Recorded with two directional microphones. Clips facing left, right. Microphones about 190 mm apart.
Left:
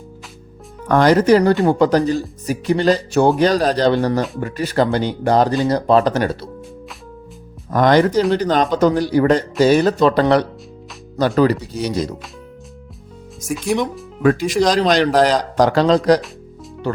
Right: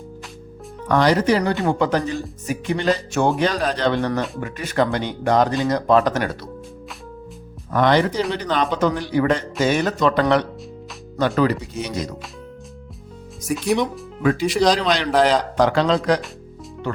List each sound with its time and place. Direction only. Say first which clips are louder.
0.9 s speech: left 5 dB; 45° left (ahead or behind); by 6.5 s 30° left (ahead or behind)
7.7 s speech: left 4 dB; 45° left (ahead or behind)
13.5 s speech: left 1 dB; centre (ahead or behind)
14.2 s speech: left 3 dB; 45° left (ahead or behind)